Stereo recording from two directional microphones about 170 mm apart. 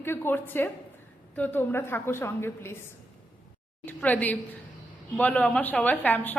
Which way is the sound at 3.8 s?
10° left (ahead or behind).